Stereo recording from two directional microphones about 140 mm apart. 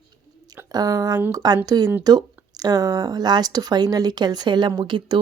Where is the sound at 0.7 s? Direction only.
25° right (ahead or behind).